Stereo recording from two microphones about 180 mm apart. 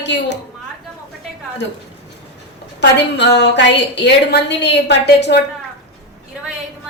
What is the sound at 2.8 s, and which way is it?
A woman's voice, 70° left (ahead or behind).